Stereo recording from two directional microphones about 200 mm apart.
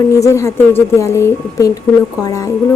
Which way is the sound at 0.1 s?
15° left (ahead or behind).